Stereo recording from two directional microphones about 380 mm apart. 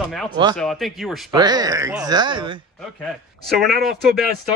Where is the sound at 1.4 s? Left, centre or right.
Centre.